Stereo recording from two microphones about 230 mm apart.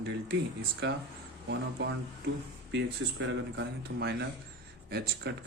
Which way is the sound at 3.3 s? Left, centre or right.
Right.